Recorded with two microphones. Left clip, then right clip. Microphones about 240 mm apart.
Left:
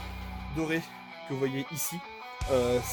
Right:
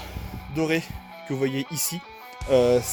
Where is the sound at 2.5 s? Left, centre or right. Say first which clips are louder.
Right 8 dB; right.